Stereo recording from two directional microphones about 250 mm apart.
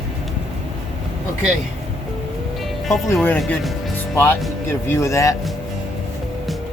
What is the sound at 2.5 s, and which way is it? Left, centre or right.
Music, centre.